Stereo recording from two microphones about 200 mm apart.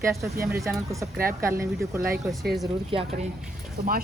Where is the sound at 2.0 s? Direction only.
50° right (ahead or behind).